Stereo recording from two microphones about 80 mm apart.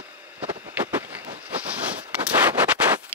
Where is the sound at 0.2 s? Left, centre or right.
Right.